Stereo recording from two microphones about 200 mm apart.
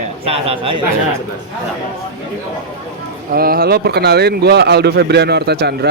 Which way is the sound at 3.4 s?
50° right (ahead or behind).